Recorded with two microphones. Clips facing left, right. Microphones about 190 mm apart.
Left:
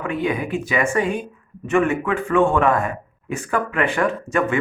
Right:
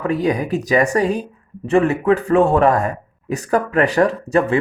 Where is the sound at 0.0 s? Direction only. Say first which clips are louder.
Right 4 dB; 40° right (ahead or behind).